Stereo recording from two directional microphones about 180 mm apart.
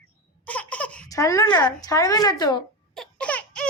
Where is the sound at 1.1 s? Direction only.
20° left (ahead or behind).